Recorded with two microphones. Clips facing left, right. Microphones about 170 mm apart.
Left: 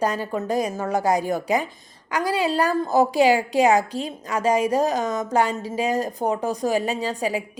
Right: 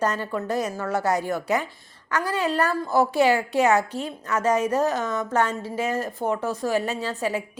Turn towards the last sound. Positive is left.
turn(degrees=15)  # may be behind; listen again after turning